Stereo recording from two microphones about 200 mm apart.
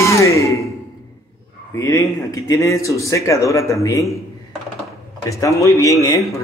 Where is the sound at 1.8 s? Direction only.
15° left (ahead or behind).